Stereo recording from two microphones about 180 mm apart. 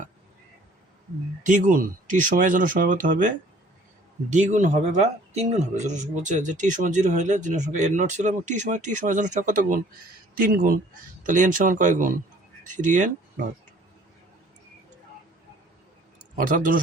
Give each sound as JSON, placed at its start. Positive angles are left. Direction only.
{"t": 1.5, "sound": "a man's voice", "side_deg": -45}
{"t": 16.4, "sound": "a man's voice", "side_deg": -50}